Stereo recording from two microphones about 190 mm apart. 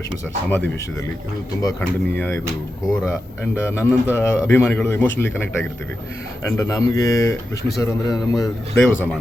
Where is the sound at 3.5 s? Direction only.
15° left (ahead or behind).